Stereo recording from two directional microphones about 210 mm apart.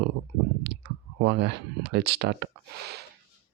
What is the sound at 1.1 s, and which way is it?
Speech, 55° right (ahead or behind).